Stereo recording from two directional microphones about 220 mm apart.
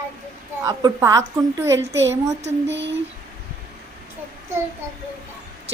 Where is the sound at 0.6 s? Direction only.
15° right (ahead or behind).